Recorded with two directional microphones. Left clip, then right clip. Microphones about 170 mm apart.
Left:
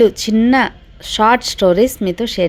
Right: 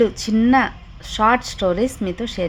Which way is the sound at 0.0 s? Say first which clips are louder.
Left 5 dB; 20° left (ahead or behind).